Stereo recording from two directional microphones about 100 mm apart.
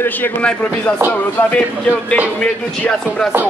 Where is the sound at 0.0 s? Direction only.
20° left (ahead or behind).